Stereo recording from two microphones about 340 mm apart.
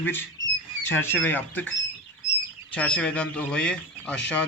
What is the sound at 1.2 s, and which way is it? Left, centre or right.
Speech, centre.